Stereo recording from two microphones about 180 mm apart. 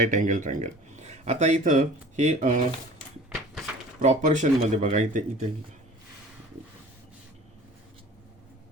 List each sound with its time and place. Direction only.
0.0 s speech: 45° right (ahead or behind)
4.0 s speech: 40° right (ahead or behind)